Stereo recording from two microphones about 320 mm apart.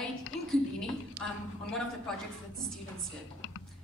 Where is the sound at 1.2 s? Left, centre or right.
Right.